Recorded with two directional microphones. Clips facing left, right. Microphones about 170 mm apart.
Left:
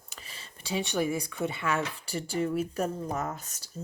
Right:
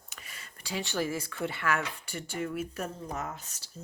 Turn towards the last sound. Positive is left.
turn(degrees=45)  # may be behind; listen again after turning